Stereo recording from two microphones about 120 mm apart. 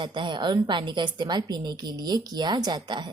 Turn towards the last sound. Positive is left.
turn(degrees=-35)  # may be behind; listen again after turning